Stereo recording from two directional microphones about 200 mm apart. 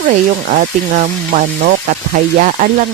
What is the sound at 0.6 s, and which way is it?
Sizzle, 40° right (ahead or behind).